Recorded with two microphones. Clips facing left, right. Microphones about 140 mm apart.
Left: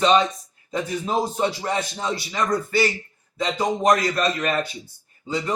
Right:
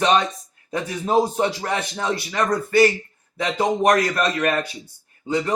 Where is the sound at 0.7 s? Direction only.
55° right (ahead or behind).